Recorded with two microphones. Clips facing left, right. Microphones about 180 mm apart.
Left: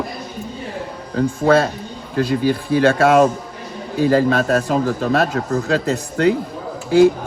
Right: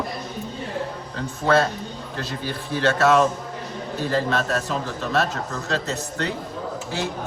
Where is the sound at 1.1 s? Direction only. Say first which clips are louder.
Left 6 dB; 45° left (ahead or behind).